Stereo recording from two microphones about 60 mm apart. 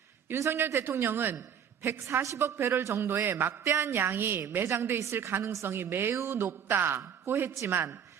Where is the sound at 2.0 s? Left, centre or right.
Right.